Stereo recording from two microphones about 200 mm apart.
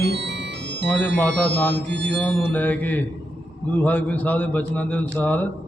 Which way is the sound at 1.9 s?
60° right (ahead or behind).